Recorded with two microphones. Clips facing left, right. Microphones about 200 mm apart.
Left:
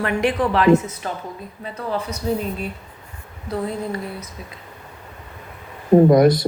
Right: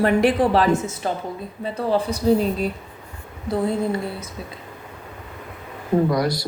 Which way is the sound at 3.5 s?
30° right (ahead or behind).